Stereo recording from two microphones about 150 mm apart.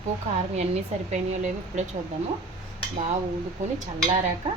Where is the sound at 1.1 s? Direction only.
55° right (ahead or behind).